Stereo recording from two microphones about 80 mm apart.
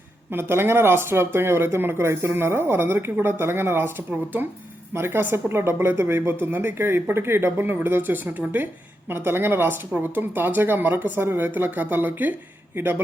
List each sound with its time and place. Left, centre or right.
0.3 s speech: right